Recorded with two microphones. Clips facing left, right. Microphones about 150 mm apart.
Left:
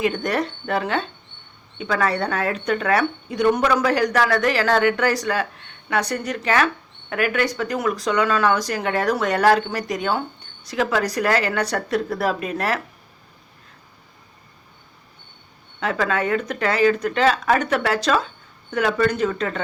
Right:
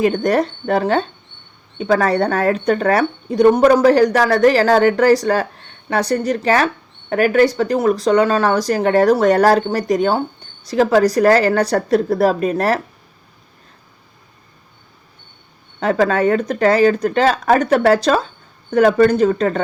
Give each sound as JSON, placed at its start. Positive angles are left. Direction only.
{"t": 0.0, "sound": "speech", "side_deg": -40}
{"t": 15.8, "sound": "speech", "side_deg": -40}